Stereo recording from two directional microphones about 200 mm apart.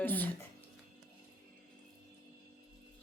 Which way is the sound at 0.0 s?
10° left (ahead or behind).